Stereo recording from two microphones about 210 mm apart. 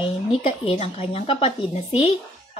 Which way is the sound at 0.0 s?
25° left (ahead or behind).